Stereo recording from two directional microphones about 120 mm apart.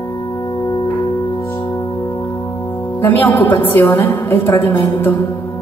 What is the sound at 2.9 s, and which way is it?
A woman's voice, 15° left (ahead or behind).